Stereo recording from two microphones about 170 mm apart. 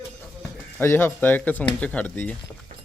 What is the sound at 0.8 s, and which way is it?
A man's voice, 15° left (ahead or behind).